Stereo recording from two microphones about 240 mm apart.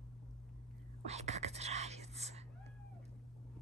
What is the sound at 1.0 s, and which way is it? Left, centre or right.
Whispering, right.